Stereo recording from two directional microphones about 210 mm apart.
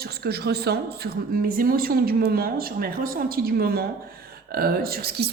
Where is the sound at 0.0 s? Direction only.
50° right (ahead or behind).